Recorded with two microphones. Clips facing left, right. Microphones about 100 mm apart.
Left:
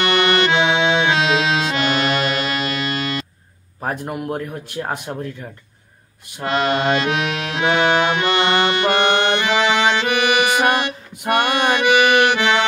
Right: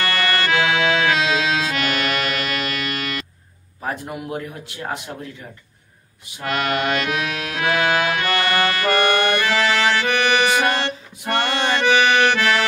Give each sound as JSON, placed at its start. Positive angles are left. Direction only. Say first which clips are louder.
{"t": 0.0, "sound": "accordion", "louder": "left 5 dB", "side_deg": 20}
{"t": 3.8, "sound": "speech", "louder": "left 3 dB", "side_deg": 50}
{"t": 5.1, "sound": "speech", "louder": "left 5 dB", "side_deg": 35}
{"t": 6.4, "sound": "accordion", "louder": "left 3 dB", "side_deg": 30}